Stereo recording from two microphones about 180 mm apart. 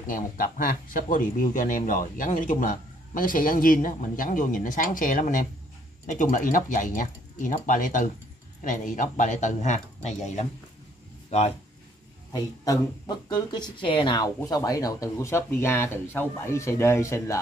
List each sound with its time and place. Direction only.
0.1 s speech: 50° left (ahead or behind)
12.3 s speech: 20° left (ahead or behind)